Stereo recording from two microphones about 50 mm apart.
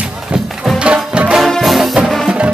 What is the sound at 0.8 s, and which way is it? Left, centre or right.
Music, right.